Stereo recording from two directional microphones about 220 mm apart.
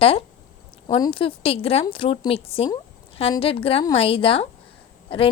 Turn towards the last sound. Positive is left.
turn(degrees=25)  # may be behind; listen again after turning